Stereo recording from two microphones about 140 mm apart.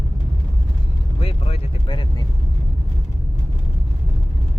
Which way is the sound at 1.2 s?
45° left (ahead or behind).